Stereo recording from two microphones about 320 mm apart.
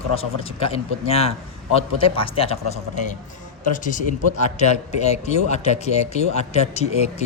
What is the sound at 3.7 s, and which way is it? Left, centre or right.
Speech, left.